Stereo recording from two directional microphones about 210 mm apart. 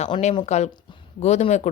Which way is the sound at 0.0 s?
30° left (ahead or behind).